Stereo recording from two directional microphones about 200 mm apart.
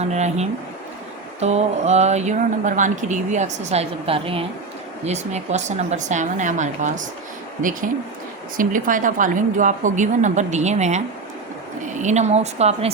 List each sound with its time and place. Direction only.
0.0 s speech: 35° right (ahead or behind)